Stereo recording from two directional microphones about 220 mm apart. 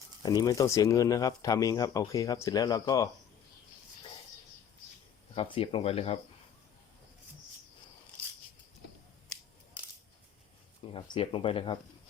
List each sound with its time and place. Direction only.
0.2 s speech: 15° left (ahead or behind)
5.3 s speech: 25° left (ahead or behind)
10.9 s speech: 25° left (ahead or behind)